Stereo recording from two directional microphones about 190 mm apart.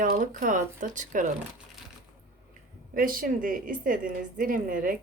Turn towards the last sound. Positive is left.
turn(degrees=-45)  # may be behind; listen again after turning